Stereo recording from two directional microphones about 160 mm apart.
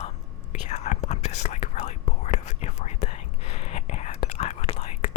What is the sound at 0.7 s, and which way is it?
Whispering, 45° left (ahead or behind).